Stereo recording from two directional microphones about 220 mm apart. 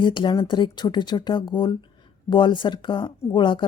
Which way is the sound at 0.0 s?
20° left (ahead or behind).